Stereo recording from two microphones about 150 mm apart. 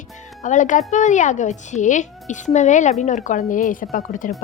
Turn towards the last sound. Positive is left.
turn(degrees=60)  # may be behind; listen again after turning